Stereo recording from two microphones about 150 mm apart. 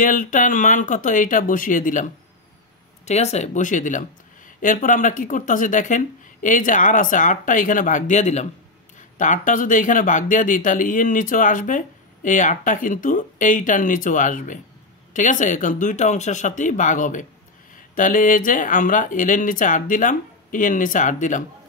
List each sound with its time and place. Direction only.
0.0 s speech: 60° left (ahead or behind)
3.1 s speech: 50° left (ahead or behind)